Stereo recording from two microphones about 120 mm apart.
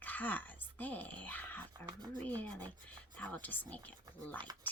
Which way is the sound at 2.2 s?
15° left (ahead or behind).